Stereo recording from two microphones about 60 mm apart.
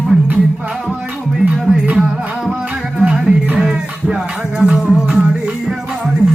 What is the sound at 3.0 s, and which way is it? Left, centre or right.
Music, centre.